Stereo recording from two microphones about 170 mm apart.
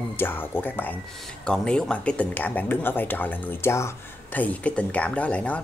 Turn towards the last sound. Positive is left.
turn(degrees=10)  # may be behind; listen again after turning